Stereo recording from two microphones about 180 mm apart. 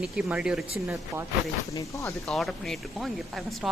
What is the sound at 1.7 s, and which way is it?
Speech, 15° left (ahead or behind).